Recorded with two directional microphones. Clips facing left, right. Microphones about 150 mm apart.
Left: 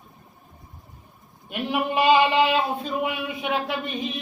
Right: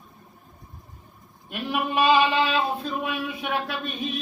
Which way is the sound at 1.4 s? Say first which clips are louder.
Left 2 dB; 20° left (ahead or behind).